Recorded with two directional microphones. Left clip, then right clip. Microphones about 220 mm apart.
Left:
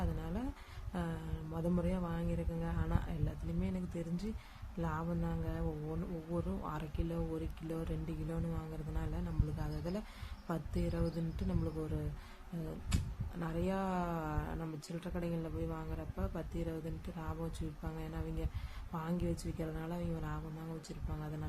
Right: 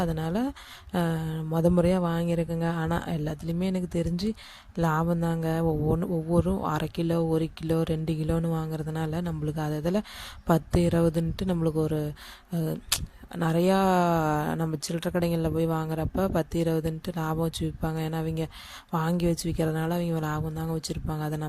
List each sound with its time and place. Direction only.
0.0 s speech: 45° right (ahead or behind)
13.4 s speech: 45° right (ahead or behind)